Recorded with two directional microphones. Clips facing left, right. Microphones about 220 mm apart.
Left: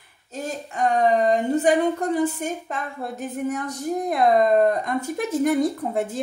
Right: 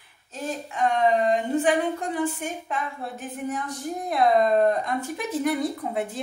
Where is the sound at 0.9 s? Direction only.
45° left (ahead or behind).